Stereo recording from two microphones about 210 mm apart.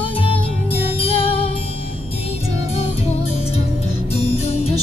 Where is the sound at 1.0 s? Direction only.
25° left (ahead or behind).